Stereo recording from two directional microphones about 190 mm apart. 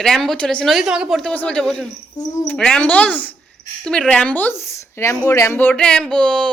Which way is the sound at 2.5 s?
5° left (ahead or behind).